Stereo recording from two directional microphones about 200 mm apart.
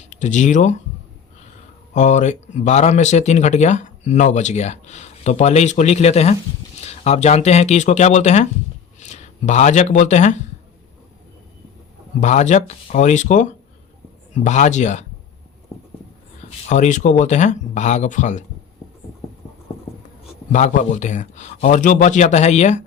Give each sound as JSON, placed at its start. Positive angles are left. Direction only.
{"t": 0.0, "sound": "speech", "side_deg": 35}
{"t": 1.9, "sound": "speech", "side_deg": 35}
{"t": 12.2, "sound": "speech", "side_deg": 35}
{"t": 16.6, "sound": "speech", "side_deg": 35}
{"t": 20.5, "sound": "speech", "side_deg": 35}